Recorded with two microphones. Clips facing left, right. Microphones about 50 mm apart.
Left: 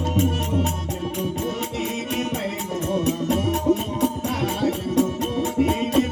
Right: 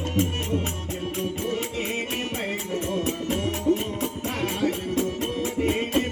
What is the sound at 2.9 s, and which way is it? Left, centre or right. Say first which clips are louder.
Music: left 6 dB; right.